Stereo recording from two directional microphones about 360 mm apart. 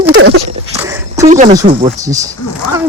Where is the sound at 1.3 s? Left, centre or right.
Centre.